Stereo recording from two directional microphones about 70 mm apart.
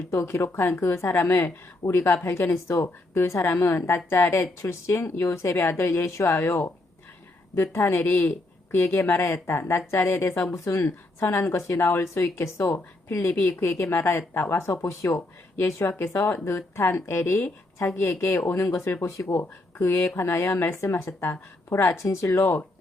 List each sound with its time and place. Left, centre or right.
0.1 s speech: left
10.8 s speech: left
13.2 s speech: left
14.7 s speech: left
22.0 s speech: left